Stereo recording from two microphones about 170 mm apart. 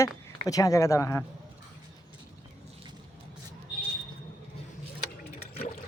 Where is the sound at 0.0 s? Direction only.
20° left (ahead or behind).